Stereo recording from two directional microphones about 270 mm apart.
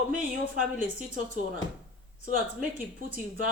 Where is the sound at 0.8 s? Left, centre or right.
Right.